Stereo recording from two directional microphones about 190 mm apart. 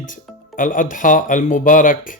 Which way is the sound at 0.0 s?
45° left (ahead or behind).